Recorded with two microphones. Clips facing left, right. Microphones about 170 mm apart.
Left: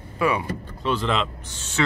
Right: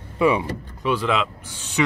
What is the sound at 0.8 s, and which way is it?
Speech, 10° right (ahead or behind).